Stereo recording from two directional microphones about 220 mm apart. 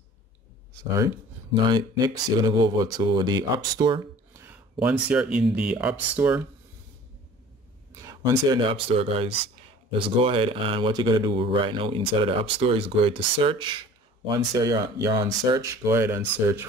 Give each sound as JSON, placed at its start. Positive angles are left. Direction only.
{"t": 0.9, "sound": "speech", "side_deg": -15}
{"t": 8.0, "sound": "speech", "side_deg": -15}